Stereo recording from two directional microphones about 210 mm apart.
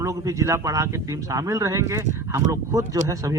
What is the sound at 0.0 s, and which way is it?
Speech, 15° right (ahead or behind).